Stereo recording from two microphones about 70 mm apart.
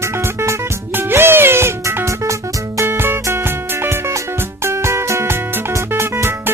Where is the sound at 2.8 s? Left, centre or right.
Right.